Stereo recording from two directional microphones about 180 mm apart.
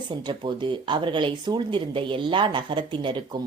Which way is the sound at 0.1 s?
25° right (ahead or behind).